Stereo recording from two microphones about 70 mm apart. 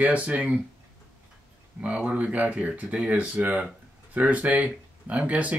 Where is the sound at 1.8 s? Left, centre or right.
Centre.